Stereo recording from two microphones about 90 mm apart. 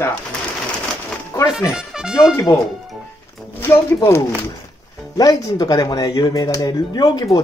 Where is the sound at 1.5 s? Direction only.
5° right (ahead or behind).